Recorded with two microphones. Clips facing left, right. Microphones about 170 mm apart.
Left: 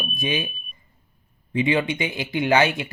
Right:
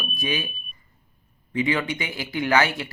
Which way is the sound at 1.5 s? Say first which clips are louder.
Left 3 dB; 25° left (ahead or behind).